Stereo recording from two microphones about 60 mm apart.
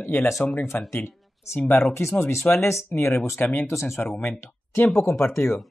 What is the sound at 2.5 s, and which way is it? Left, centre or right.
Speech, left.